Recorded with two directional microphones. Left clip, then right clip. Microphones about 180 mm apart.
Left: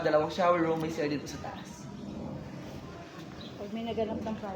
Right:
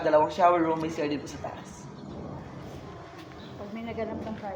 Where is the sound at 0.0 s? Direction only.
20° left (ahead or behind).